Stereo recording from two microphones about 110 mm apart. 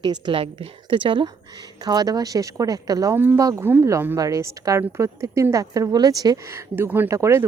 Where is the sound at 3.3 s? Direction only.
30° right (ahead or behind).